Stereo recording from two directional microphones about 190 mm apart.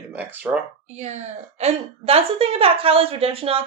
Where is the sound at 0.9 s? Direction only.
35° right (ahead or behind).